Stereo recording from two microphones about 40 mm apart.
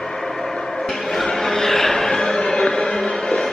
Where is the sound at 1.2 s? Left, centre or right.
Centre.